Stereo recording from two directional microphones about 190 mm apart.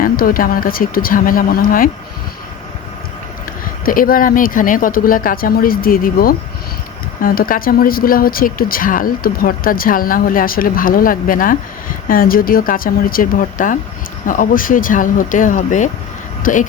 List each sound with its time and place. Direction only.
0.0 s speech: 50° left (ahead or behind)
3.8 s speech: 45° left (ahead or behind)